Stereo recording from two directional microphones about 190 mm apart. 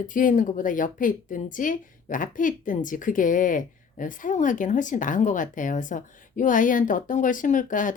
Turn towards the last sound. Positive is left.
turn(degrees=45)  # may be behind; listen again after turning